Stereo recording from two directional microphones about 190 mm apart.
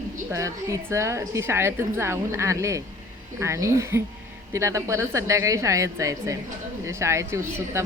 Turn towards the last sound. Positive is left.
turn(degrees=-15)  # may be behind; listen again after turning